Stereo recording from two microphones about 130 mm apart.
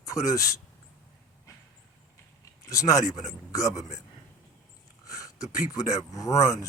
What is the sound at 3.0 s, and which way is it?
Speech, 65° left (ahead or behind).